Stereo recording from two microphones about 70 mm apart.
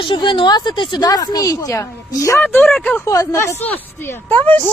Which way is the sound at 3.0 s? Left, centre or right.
Left.